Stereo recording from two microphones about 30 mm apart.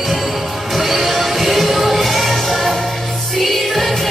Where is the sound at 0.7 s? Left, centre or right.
Centre.